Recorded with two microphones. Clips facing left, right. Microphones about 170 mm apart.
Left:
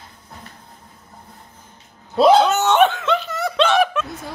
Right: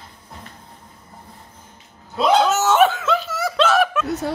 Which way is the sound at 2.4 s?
Centre (ahead or behind).